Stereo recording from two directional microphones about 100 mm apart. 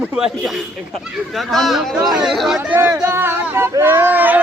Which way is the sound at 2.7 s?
25° right (ahead or behind).